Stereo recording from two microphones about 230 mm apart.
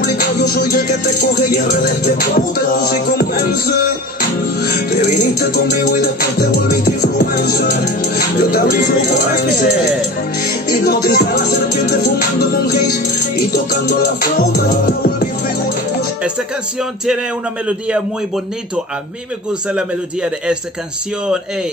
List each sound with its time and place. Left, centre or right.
0.0 s music: left
6.8 s music: left
10.4 s music: left
17.6 s a man's voice: centre